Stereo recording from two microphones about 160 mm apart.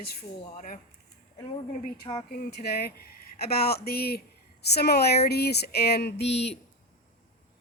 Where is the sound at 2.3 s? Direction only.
80° left.